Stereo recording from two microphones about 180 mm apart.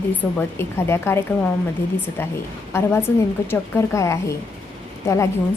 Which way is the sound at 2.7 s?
15° left (ahead or behind).